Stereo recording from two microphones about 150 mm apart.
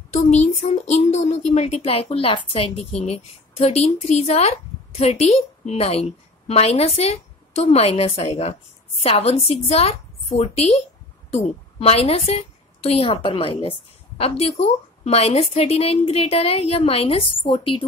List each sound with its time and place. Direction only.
0.1 s a child's voice: 50° left (ahead or behind); by 17.8 s 35° left (ahead or behind)